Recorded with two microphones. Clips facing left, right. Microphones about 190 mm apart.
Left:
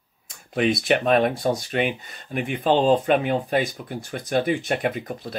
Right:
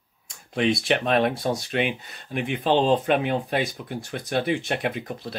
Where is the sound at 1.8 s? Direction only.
45° left (ahead or behind).